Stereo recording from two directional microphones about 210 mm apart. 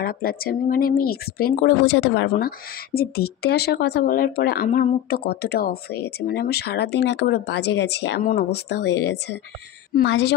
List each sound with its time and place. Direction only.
0.0 s speech: 45° left (ahead or behind)
1.9 s speech: 65° left (ahead or behind)
2.3 s a woman's voice: 45° left (ahead or behind)